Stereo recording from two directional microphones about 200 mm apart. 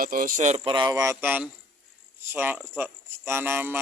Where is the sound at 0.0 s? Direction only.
45° right (ahead or behind).